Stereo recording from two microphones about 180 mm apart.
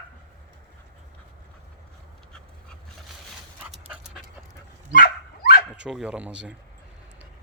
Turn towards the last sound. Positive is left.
turn(degrees=-5)  # may be behind; listen again after turning